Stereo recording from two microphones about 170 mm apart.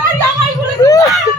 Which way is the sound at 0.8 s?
20° left (ahead or behind).